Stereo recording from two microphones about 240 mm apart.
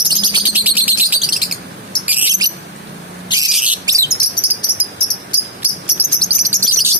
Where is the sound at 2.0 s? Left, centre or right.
Centre.